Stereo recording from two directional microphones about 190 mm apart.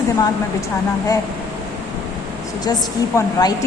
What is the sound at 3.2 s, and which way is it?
Speech, 15° left (ahead or behind).